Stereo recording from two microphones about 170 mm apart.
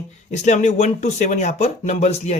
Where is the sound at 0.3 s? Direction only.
45° left (ahead or behind).